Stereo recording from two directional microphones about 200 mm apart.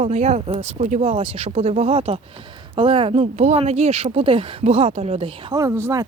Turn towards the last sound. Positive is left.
turn(degrees=-15)  # may be behind; listen again after turning